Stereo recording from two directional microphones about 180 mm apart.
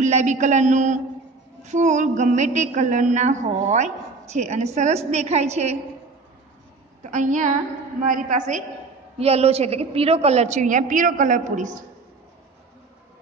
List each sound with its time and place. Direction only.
0.0 s a woman's voice: 40° right (ahead or behind)
7.0 s a woman's voice: 45° right (ahead or behind)